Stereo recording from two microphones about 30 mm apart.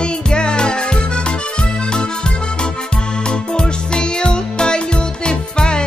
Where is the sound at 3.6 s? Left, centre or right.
Left.